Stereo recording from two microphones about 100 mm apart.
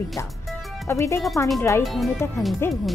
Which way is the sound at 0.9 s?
30° left (ahead or behind).